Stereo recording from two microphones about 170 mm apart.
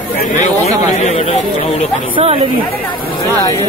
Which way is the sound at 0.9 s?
40° left (ahead or behind).